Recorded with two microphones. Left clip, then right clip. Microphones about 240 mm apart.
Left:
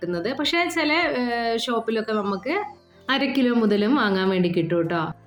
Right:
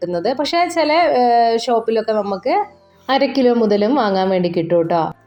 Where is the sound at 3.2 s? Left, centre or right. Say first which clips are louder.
Right 9 dB; left.